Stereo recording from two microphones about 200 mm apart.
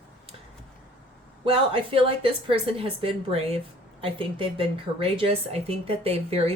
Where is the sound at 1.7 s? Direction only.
30° right (ahead or behind).